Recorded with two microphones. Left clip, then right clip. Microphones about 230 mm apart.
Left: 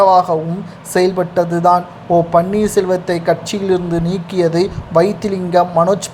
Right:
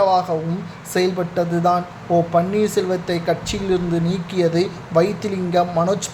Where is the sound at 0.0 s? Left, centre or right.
Centre.